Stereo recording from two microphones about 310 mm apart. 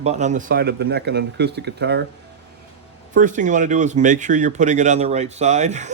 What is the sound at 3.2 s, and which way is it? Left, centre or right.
Speech, right.